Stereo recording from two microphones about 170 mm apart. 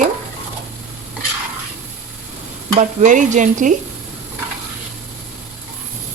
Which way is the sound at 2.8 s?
45° right (ahead or behind).